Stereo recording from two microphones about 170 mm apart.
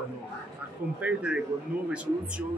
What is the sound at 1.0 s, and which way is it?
A man's voice, 5° right (ahead or behind).